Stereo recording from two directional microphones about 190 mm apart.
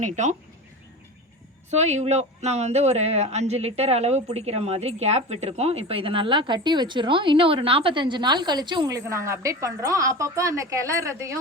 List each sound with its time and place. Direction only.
0.0 s speech: 40° right (ahead or behind)
1.7 s speech: 35° right (ahead or behind); by 11.3 s 15° right (ahead or behind)